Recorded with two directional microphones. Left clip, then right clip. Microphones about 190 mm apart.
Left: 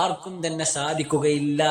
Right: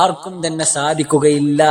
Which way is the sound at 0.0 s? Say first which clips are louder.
Right 9 dB; 35° right (ahead or behind).